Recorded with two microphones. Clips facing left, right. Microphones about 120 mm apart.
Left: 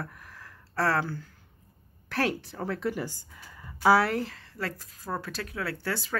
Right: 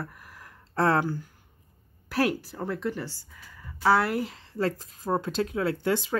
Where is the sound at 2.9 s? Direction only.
15° left (ahead or behind).